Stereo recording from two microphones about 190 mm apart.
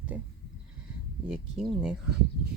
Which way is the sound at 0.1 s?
5° right (ahead or behind).